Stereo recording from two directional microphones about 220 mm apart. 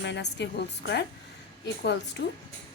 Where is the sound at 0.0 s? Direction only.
50° left (ahead or behind).